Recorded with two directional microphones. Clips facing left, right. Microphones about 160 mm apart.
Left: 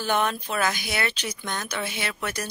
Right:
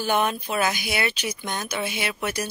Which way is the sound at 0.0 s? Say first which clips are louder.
Right 2 dB; 10° right (ahead or behind).